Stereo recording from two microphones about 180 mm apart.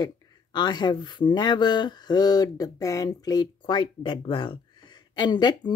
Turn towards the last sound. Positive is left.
turn(degrees=25)  # may be behind; listen again after turning